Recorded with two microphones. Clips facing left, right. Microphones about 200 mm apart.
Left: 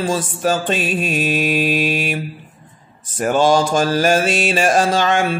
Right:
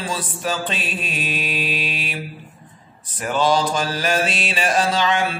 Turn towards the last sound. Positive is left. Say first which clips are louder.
# left 4 dB
turn(degrees=45)  # may be behind; listen again after turning